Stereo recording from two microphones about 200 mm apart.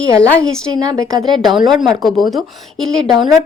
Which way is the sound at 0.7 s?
20° right (ahead or behind).